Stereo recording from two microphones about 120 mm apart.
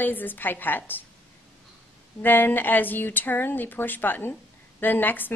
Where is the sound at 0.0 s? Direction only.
15° left (ahead or behind).